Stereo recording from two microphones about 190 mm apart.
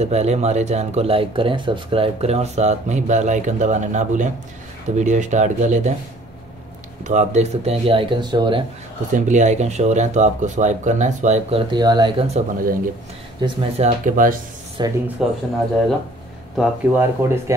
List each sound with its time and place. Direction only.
0.0 s speech: 35° right (ahead or behind)
7.1 s speech: 35° right (ahead or behind)
9.1 s speech: 40° right (ahead or behind)
11.6 s speech: 20° right (ahead or behind)
13.8 s speech: 45° right (ahead or behind)
14.8 s speech: 25° right (ahead or behind)
15.2 s speech: 5° right (ahead or behind)
16.5 s speech: 10° right (ahead or behind)